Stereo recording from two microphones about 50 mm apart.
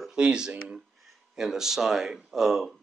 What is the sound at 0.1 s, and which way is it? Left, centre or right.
A man's voice, centre.